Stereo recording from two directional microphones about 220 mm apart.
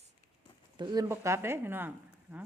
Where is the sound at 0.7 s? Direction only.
20° right (ahead or behind).